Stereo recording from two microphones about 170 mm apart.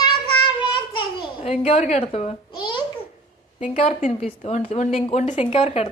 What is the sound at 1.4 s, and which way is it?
A child's voice, 35° left (ahead or behind).